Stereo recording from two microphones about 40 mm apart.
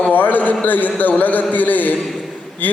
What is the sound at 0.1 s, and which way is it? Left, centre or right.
A man's voice, left.